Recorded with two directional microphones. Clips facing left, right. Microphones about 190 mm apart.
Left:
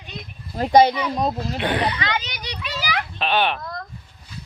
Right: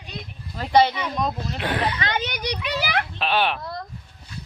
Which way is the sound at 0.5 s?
40° left (ahead or behind).